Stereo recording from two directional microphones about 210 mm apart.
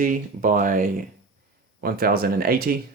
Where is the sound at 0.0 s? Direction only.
40° right (ahead or behind).